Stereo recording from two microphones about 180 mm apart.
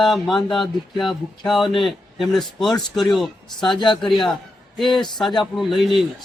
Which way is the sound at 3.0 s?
Centre (ahead or behind).